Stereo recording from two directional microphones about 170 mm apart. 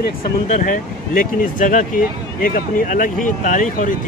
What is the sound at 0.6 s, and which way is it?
Speech, 55° left (ahead or behind).